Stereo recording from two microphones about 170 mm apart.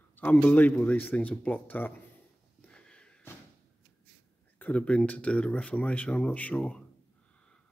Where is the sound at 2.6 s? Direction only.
5° left (ahead or behind).